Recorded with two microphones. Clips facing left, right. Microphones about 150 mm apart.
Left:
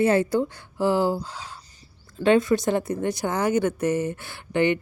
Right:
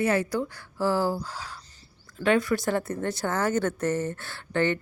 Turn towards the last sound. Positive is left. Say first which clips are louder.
# left 4 dB
turn(degrees=15)  # may be behind; listen again after turning